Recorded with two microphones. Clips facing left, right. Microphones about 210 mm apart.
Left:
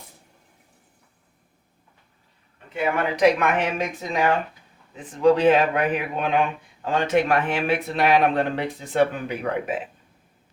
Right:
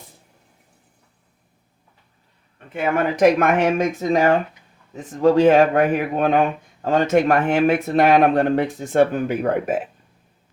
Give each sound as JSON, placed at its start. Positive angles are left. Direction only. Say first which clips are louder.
{"t": 2.7, "sound": "a man's voice", "louder": "right 4 dB", "side_deg": -45}